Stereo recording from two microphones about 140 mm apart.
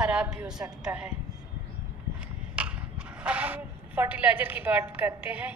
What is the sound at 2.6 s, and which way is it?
Speech, 10° right (ahead or behind).